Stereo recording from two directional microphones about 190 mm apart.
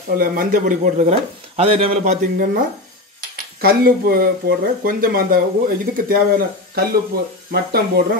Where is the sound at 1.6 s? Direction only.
30° right (ahead or behind).